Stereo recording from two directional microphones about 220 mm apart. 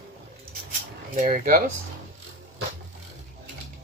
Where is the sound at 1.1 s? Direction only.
40° right (ahead or behind).